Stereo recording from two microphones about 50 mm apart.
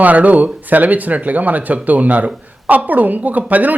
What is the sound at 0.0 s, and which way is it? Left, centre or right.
Speech, right.